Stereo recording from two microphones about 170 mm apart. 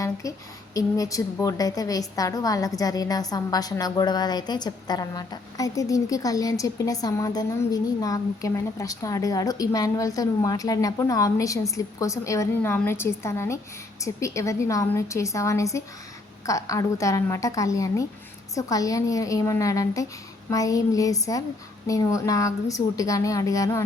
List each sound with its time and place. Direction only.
0.0 s a woman's voice: 20° left (ahead or behind)